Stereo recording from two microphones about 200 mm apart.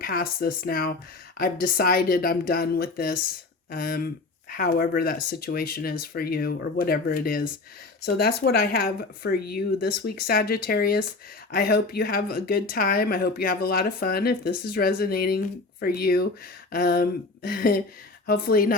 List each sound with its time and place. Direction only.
0.0 s speech: 45° left (ahead or behind)